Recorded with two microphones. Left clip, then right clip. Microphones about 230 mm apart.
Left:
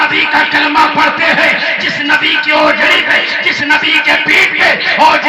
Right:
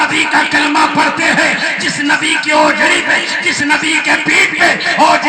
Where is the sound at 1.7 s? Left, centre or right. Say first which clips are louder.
Left 2 dB; right.